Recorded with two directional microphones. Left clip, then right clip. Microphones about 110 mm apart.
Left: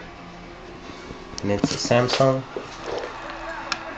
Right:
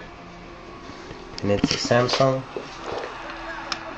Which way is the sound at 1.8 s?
20° left (ahead or behind).